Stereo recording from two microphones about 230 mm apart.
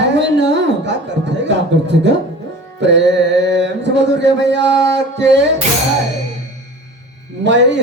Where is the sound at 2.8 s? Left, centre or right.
Right.